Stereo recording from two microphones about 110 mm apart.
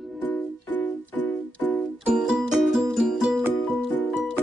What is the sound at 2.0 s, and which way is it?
Music, 5° right (ahead or behind).